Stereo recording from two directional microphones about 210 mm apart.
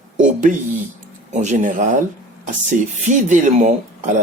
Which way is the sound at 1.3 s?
35° right (ahead or behind).